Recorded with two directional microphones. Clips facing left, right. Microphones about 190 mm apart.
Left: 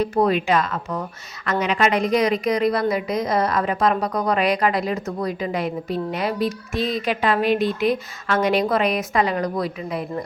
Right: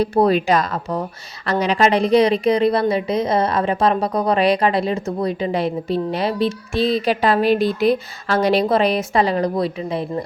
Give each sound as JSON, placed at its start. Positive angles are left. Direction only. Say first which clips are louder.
{"t": 0.0, "sound": "a woman's voice", "louder": "right 3 dB", "side_deg": -35}